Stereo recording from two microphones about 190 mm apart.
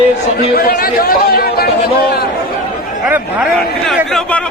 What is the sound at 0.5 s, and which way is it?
A man's voice, 50° left (ahead or behind).